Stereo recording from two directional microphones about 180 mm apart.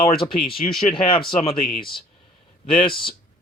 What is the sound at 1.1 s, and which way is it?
Speech, 30° left (ahead or behind).